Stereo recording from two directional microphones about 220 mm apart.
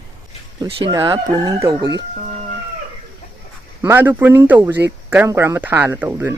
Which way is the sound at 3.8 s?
10° right (ahead or behind).